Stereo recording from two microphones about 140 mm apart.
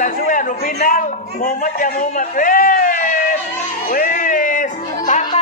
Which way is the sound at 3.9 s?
75° left (ahead or behind).